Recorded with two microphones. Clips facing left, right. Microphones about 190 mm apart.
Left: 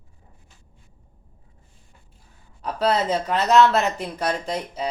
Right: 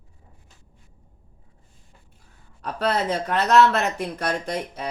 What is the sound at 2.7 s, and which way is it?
Speech, 60° right (ahead or behind).